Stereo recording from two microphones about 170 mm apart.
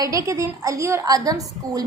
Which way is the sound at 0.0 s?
20° right (ahead or behind).